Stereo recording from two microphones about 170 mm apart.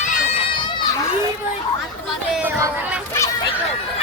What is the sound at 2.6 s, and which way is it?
Speech, 10° right (ahead or behind).